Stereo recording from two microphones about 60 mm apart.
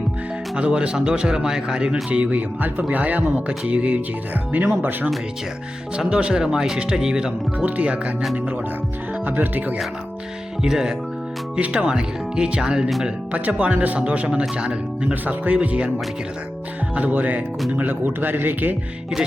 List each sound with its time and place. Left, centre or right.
0.5 s speech: centre
6.0 s speech: centre
7.6 s speech: right
9.2 s speech: right
10.6 s speech: centre
11.5 s speech: right
13.3 s speech: right
16.9 s speech: right